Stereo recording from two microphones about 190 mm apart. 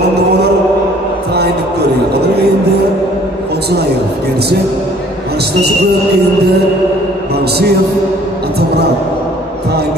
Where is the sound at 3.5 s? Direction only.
60° right (ahead or behind).